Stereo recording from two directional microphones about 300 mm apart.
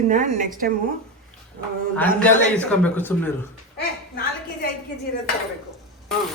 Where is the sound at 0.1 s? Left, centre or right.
Right.